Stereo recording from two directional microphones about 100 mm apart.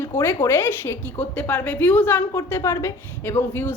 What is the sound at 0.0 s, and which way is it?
A woman's voice, 25° left (ahead or behind).